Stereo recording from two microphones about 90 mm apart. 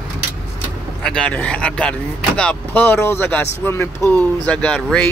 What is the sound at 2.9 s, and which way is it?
Speech, 25° left (ahead or behind).